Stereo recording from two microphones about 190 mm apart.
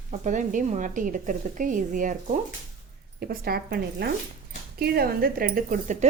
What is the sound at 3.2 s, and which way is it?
A woman's voice, 55° right (ahead or behind).